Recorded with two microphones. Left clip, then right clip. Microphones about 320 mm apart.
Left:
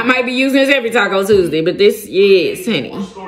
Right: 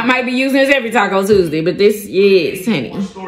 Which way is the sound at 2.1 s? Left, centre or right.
Right.